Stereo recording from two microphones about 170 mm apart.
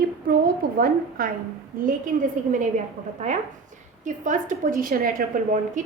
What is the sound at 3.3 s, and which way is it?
A woman's voice, 40° right (ahead or behind).